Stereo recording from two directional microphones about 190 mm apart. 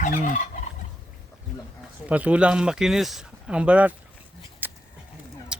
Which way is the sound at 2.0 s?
5° right (ahead or behind).